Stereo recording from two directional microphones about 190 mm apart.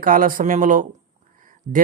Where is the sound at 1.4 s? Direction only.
45° right (ahead or behind).